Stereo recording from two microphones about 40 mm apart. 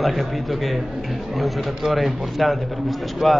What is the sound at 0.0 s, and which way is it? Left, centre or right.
A man's voice, centre.